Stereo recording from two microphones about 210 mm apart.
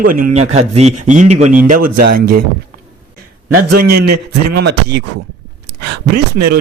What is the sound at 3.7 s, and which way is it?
Speech, 50° right (ahead or behind).